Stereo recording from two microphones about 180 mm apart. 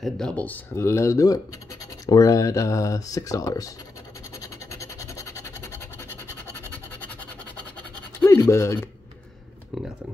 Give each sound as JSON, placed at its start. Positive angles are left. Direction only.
{"t": 0.0, "sound": "speech", "side_deg": 5}
{"t": 5.1, "sound": "scratch", "side_deg": 15}
{"t": 8.2, "sound": "speech", "side_deg": 15}